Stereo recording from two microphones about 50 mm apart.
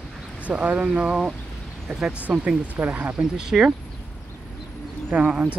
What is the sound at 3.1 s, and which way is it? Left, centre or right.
Speech, centre.